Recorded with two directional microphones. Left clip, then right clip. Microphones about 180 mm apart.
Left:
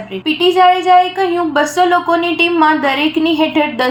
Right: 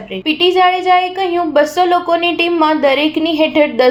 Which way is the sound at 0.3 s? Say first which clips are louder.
Left 1 dB; 40° right (ahead or behind).